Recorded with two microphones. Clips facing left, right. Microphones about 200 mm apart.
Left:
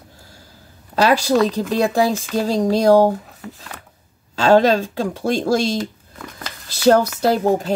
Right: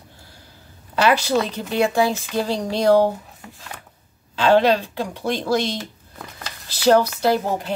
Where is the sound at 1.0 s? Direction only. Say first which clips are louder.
Left 3 dB; 40° left (ahead or behind).